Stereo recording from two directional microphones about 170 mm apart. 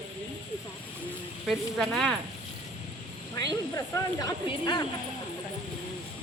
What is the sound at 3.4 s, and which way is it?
Speech, 20° left (ahead or behind).